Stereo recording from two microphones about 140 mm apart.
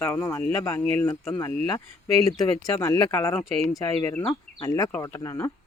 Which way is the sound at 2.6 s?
20° left (ahead or behind).